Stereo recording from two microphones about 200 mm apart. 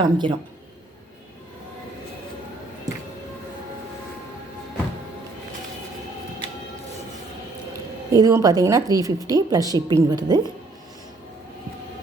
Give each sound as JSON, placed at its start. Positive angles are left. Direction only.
{"t": 0.0, "sound": "speech", "side_deg": -25}
{"t": 8.1, "sound": "a woman's voice", "side_deg": -15}